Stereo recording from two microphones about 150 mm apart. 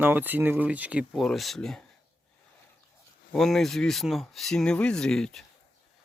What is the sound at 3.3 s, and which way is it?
Speech, centre (ahead or behind).